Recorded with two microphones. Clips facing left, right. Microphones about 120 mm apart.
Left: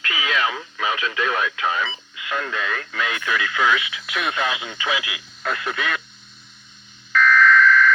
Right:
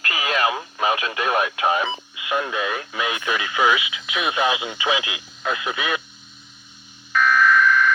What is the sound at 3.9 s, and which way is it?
Radio, centre (ahead or behind).